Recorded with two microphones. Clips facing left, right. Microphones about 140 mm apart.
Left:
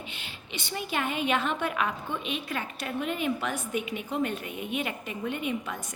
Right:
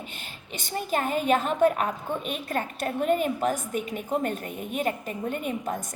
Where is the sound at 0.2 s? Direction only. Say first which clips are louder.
Right 1 dB; 45° right (ahead or behind).